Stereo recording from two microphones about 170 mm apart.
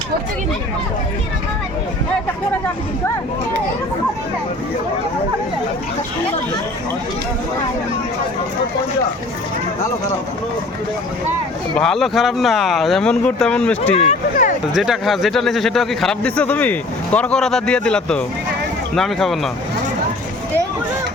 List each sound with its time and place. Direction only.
11.8 s a man's voice: centre (ahead or behind)
13.9 s a sound: 40° left (ahead or behind)
14.7 s a man's voice: centre (ahead or behind)